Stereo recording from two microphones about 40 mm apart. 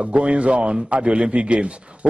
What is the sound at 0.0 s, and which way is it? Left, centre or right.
A man's voice, right.